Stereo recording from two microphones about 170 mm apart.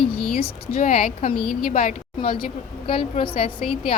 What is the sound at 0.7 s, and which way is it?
A woman's voice, 40° left (ahead or behind).